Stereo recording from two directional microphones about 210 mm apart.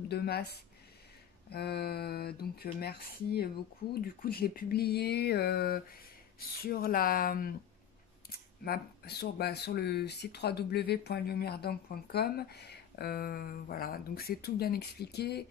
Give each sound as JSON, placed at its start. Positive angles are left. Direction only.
{"t": 0.1, "sound": "speech", "side_deg": 50}